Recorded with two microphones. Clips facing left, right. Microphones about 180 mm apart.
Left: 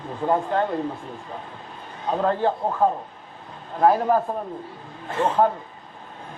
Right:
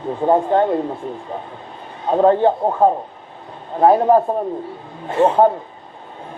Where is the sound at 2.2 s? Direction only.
25° right (ahead or behind).